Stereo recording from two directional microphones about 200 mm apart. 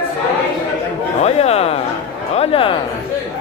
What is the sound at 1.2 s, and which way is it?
Speech, 30° left (ahead or behind).